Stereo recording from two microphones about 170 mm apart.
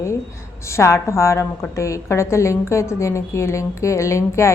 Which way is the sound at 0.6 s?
15° left (ahead or behind).